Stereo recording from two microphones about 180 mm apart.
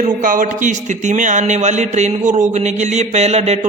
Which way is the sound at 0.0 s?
50° right (ahead or behind).